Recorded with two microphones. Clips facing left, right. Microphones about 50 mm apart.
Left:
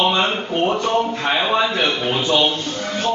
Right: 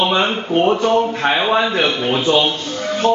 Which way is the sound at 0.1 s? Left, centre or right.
Centre.